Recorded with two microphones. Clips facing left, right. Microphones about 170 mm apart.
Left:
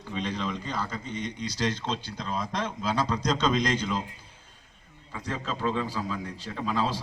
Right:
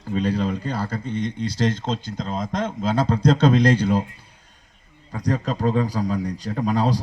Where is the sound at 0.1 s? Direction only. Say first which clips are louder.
Right 9 dB; 35° right (ahead or behind).